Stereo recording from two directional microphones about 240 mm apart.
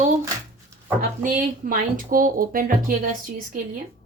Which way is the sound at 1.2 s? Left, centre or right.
Right.